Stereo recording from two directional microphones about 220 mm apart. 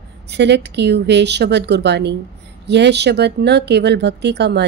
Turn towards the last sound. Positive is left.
turn(degrees=-50)  # may be behind; listen again after turning